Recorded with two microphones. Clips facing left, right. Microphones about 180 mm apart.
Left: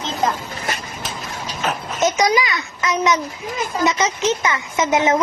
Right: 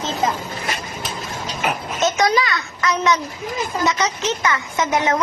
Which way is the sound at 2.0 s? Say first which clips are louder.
Left 1 dB; 15° left (ahead or behind).